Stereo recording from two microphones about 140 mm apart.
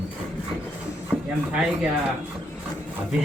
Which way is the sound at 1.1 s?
10° right (ahead or behind).